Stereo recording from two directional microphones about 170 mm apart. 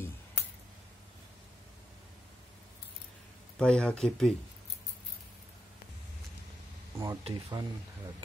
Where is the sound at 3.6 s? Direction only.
5° left (ahead or behind).